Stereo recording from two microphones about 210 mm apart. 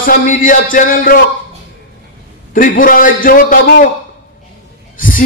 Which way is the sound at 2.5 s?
40° left (ahead or behind).